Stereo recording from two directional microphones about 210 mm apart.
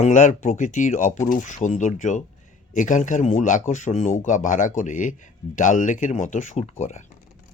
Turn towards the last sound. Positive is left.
turn(degrees=30)  # may be behind; listen again after turning